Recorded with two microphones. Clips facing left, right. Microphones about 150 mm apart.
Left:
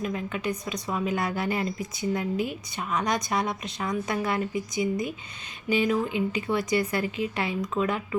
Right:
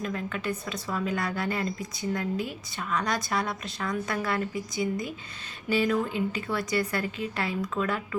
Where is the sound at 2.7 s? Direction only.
20° left (ahead or behind).